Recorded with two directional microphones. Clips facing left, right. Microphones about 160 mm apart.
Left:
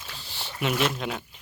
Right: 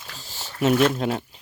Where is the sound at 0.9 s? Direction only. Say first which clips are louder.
Right 7 dB; 40° right (ahead or behind).